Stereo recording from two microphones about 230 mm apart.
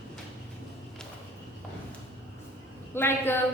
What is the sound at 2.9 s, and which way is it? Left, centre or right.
Speech, centre.